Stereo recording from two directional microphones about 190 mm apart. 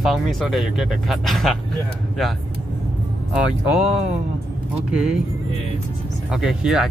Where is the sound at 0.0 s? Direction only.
Centre (ahead or behind).